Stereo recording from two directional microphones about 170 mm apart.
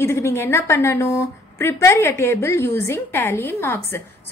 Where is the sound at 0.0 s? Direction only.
15° left (ahead or behind).